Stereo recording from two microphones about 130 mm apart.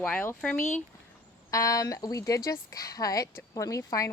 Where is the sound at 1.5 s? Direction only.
25° left (ahead or behind).